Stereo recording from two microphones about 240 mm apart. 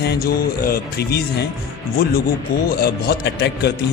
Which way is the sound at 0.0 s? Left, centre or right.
Left.